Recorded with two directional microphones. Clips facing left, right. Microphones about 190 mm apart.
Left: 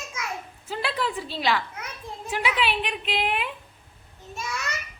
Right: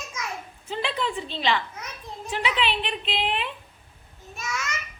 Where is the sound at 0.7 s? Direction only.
5° left (ahead or behind).